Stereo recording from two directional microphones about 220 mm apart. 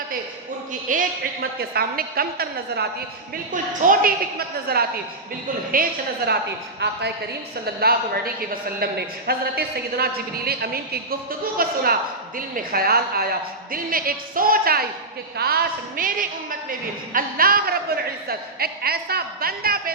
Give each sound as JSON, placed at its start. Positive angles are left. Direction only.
{"t": 0.7, "sound": "a woman's voice", "side_deg": -35}